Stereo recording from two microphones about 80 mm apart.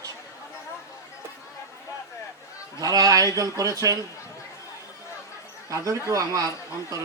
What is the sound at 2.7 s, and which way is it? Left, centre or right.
Speech, right.